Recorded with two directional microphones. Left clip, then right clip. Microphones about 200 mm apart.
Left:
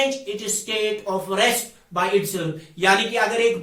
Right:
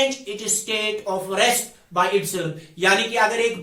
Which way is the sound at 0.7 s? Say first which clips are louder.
Left 1 dB; 15° right (ahead or behind).